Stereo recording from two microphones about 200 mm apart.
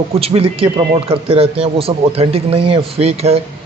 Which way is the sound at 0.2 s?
30° right (ahead or behind).